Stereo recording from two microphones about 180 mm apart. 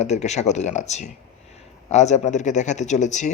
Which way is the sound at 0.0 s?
40° left (ahead or behind).